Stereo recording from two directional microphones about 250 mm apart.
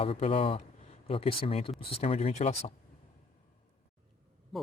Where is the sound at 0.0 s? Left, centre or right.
Left.